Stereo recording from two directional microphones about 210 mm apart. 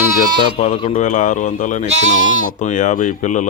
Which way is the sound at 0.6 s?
35° left (ahead or behind).